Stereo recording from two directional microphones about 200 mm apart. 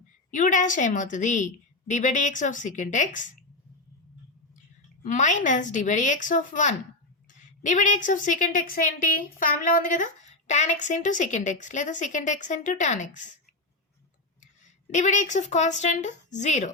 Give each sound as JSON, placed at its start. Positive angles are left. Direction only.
{"t": 0.3, "sound": "a woman's voice", "side_deg": 40}
{"t": 5.0, "sound": "a woman's voice", "side_deg": 40}
{"t": 14.8, "sound": "a woman's voice", "side_deg": 35}